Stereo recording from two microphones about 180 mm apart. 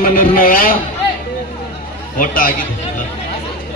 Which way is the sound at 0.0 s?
50° left (ahead or behind).